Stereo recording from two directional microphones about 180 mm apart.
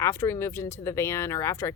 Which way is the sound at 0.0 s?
15° left (ahead or behind).